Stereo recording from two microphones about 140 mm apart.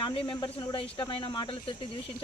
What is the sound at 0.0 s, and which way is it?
Speech, 40° left (ahead or behind).